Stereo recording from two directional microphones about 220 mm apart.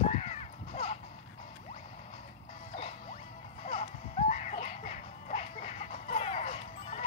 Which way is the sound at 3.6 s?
25° left (ahead or behind).